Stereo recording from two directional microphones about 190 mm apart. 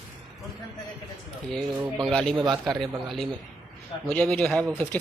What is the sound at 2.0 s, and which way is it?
Speech, centre (ahead or behind).